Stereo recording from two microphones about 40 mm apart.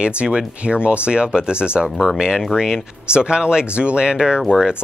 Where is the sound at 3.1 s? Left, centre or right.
Right.